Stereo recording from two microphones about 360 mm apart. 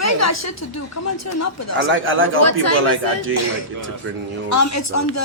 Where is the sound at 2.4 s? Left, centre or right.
Left.